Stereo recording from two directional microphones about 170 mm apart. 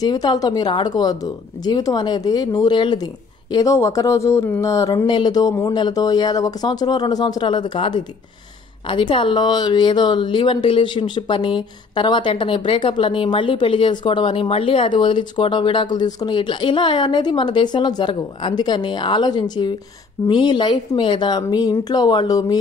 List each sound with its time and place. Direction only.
0.0 s speech: 25° left (ahead or behind)